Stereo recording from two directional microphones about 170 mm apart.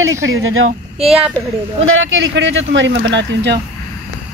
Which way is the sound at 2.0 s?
90° right.